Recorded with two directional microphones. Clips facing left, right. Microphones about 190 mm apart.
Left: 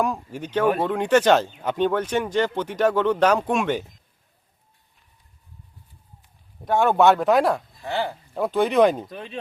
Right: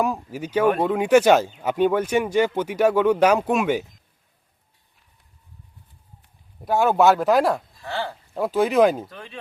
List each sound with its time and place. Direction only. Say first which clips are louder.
0.0 s speech: right 1 dB; 5° right (ahead or behind)
6.7 s speech: even; 5° right (ahead or behind)
7.8 s dog: left 3 dB; 20° left (ahead or behind)
8.3 s speech: right 1 dB; centre (ahead or behind)
9.0 s speech: left 5 dB; 20° left (ahead or behind)